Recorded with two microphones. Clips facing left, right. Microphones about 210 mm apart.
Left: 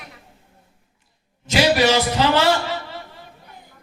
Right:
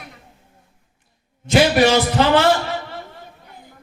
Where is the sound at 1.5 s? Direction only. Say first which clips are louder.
Right 3 dB; 50° right (ahead or behind).